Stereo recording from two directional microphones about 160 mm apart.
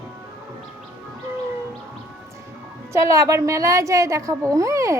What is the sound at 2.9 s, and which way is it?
Speech, 20° right (ahead or behind).